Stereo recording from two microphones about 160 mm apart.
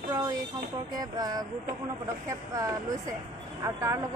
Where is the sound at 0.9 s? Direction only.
25° right (ahead or behind).